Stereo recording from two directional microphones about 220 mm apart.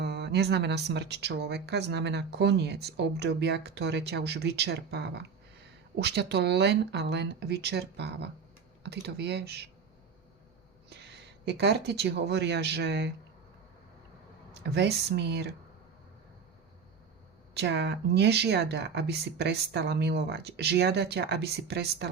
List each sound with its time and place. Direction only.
0.0 s speech: 50° right (ahead or behind)
11.4 s speech: 50° right (ahead or behind)
14.5 s speech: 50° right (ahead or behind)
17.5 s speech: 50° right (ahead or behind)